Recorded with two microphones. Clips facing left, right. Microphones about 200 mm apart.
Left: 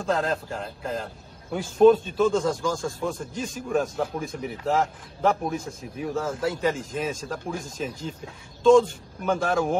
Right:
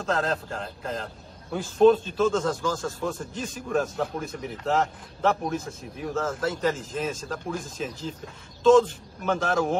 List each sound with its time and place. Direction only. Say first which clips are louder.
0.0 s a man's voice: left 1 dB; 5° left (ahead or behind)
8.6 s a man's voice: left 1 dB; centre (ahead or behind)